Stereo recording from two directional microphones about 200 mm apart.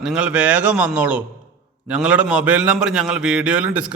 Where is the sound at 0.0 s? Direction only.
5° right (ahead or behind).